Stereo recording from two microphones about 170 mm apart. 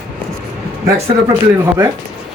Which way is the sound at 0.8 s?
20° right (ahead or behind).